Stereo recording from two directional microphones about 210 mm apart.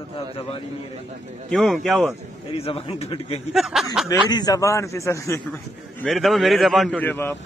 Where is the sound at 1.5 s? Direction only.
Centre (ahead or behind).